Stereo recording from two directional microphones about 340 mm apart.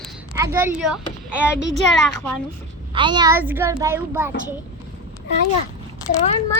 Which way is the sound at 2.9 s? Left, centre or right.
Centre.